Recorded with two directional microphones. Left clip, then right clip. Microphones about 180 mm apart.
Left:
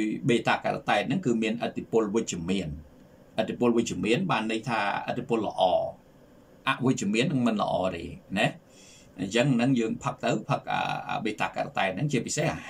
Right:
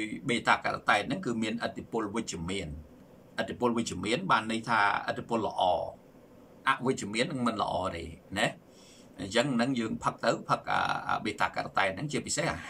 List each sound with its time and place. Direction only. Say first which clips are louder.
0.0 s a man's voice: left 4 dB; 20° left (ahead or behind)